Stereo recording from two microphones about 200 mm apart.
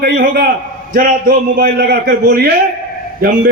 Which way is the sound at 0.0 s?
50° right (ahead or behind).